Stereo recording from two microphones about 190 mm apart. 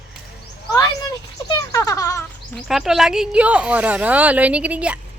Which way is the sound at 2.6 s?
Centre (ahead or behind).